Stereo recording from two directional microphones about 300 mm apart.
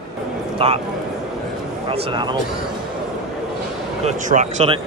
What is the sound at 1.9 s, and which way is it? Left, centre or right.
Speech, centre.